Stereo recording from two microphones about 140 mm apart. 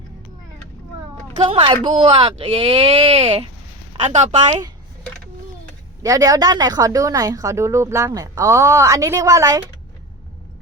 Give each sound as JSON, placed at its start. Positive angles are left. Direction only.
{"t": 1.5, "sound": "speech", "side_deg": -35}
{"t": 6.0, "sound": "speech", "side_deg": -25}